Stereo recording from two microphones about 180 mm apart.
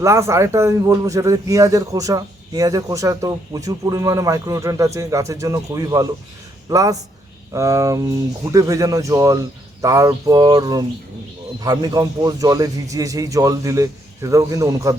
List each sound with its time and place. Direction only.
0.0 s a man's voice: 15° right (ahead or behind)